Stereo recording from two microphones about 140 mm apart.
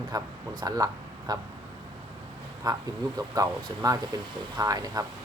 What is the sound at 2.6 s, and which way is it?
Speech, 25° right (ahead or behind).